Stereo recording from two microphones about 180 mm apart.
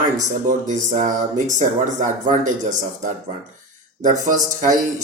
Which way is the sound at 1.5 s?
45° right (ahead or behind).